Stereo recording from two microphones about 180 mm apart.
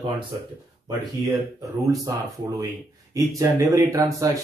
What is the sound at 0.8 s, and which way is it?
Speech, 20° right (ahead or behind).